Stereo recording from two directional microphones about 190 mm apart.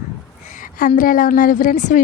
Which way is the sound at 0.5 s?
45° left (ahead or behind).